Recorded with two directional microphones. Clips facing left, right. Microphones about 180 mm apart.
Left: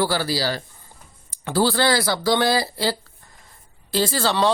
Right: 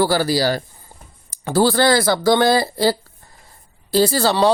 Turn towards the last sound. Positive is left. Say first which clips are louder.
# right 5 dB
turn(degrees=-35)  # may be behind; listen again after turning